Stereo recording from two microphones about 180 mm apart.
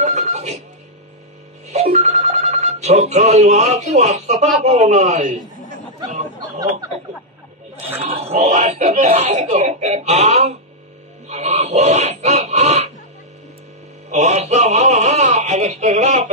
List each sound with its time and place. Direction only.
0.0 s music: 40° right (ahead or behind)
1.7 s telephone bell ringing: 35° right (ahead or behind)
4.6 s speech: 40° right (ahead or behind)
8.0 s speech: 35° right (ahead or behind)
11.2 s a sound: 40° right (ahead or behind)
14.1 s speech: 40° right (ahead or behind)